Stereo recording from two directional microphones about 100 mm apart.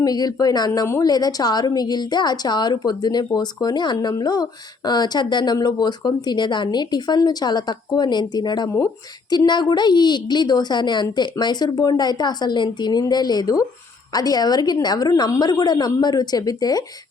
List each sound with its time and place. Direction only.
0.0 s a woman's voice: 40° left (ahead or behind)
0.7 s a woman's voice: 30° left (ahead or behind)